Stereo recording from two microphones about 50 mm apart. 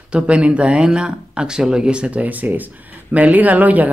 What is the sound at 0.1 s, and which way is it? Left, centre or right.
Speech, right.